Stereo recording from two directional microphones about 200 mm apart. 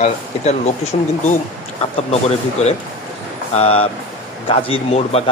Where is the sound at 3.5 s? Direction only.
30° left (ahead or behind).